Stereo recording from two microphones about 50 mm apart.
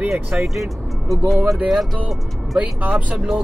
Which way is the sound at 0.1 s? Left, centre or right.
Centre.